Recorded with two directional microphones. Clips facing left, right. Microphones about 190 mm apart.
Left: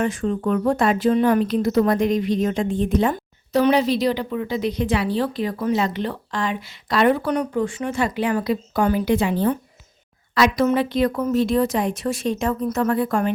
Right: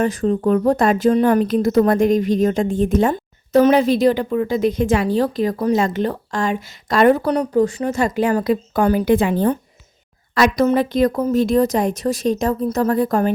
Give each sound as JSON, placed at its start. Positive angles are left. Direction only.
{"t": 0.0, "sound": "speech", "side_deg": -35}